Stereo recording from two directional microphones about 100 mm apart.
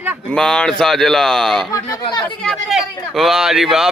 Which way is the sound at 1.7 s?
35° left (ahead or behind).